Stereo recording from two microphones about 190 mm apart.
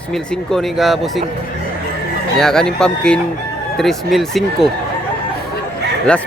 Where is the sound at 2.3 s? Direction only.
5° left (ahead or behind).